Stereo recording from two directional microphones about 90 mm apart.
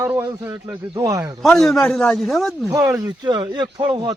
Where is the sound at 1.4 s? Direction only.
5° left (ahead or behind).